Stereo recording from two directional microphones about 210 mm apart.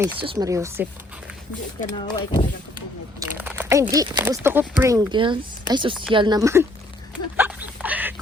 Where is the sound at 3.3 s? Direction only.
10° right (ahead or behind).